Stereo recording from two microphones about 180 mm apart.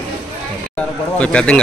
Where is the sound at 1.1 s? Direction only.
5° left (ahead or behind).